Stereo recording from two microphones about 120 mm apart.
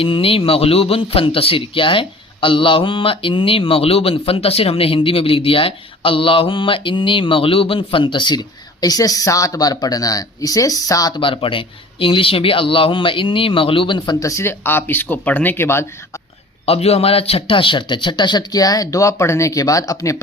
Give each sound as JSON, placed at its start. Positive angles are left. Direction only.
{"t": 0.0, "sound": "a man's voice", "side_deg": 50}
{"t": 11.2, "sound": "a man's voice", "side_deg": 45}
{"t": 14.1, "sound": "speech", "side_deg": 25}
{"t": 16.6, "sound": "a man's voice", "side_deg": 60}